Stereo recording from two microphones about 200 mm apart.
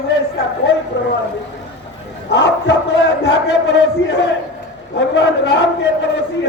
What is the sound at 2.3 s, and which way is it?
A man's voice, 60° left (ahead or behind).